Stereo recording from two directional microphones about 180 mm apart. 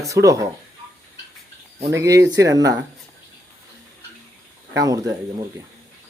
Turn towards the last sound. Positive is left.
turn(degrees=-20)  # may be behind; listen again after turning